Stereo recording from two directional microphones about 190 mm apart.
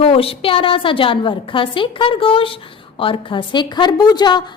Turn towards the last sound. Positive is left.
turn(degrees=25)  # may be behind; listen again after turning